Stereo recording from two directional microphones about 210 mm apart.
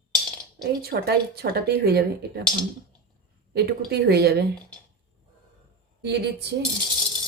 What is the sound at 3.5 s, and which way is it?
Speech, 50° right (ahead or behind).